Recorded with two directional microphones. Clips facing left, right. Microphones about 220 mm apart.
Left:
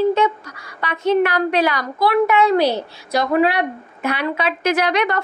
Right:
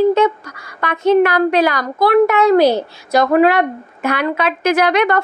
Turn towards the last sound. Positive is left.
turn(degrees=-50)  # may be behind; listen again after turning